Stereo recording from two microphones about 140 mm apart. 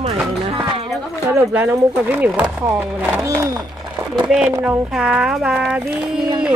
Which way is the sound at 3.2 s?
20° right (ahead or behind).